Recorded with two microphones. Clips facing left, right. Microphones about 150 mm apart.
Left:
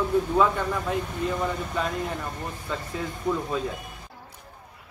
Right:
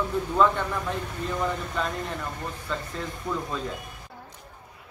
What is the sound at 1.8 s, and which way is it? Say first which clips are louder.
Speech: left 2 dB; 10° left (ahead or behind).